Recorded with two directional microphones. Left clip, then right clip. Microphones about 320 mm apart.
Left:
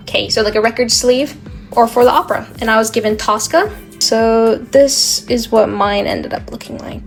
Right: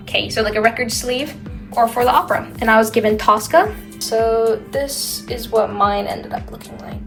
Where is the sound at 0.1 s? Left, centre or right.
Centre.